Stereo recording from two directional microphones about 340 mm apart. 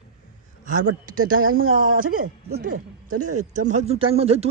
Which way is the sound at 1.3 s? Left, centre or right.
Right.